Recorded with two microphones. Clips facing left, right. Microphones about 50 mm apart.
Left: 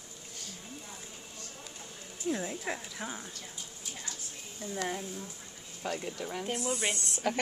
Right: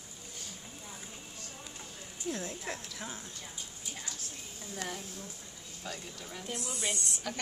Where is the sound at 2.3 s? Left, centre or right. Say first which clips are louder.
Left 4 dB; centre.